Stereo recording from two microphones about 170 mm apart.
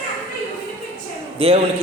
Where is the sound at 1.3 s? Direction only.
35° right (ahead or behind).